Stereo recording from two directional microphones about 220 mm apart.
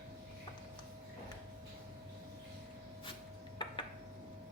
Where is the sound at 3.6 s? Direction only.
20° left (ahead or behind).